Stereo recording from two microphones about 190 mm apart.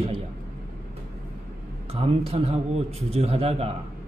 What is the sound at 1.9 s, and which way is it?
A man's voice, 30° right (ahead or behind).